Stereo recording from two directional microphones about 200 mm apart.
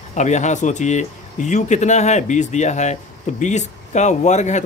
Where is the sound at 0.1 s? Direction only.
35° left (ahead or behind).